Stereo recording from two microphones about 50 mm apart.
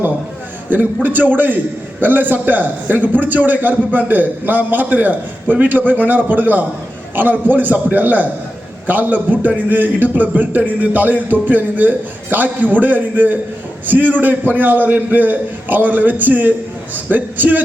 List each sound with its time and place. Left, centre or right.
0.7 s a man's voice: right